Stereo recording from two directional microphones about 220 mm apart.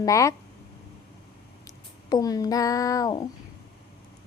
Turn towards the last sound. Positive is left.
turn(degrees=20)  # may be behind; listen again after turning